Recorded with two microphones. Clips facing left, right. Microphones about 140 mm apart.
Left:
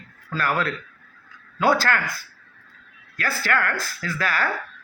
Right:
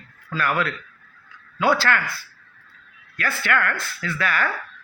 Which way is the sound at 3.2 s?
35° left (ahead or behind).